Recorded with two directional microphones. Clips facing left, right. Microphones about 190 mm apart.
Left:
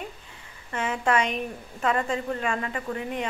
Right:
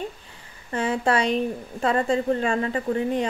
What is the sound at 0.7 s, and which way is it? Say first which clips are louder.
A woman's voice: right 3 dB; 35° right (ahead or behind).